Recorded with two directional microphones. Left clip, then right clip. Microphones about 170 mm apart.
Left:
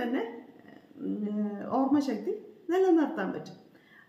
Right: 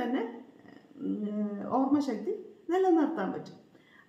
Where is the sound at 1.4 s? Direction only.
Centre (ahead or behind).